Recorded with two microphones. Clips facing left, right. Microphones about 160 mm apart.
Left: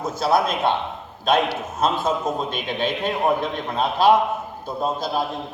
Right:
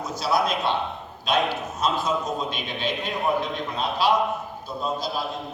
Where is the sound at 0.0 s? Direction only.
50° left (ahead or behind).